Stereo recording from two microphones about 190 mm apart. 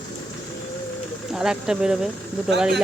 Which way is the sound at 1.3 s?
5° right (ahead or behind).